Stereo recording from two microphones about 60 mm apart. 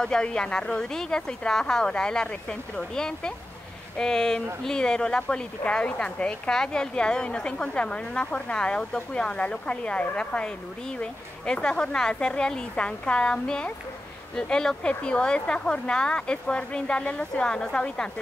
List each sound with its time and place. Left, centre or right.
0.0 s a woman's voice: centre